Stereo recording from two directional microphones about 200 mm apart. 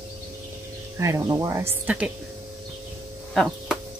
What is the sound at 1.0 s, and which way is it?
Speech, 15° right (ahead or behind).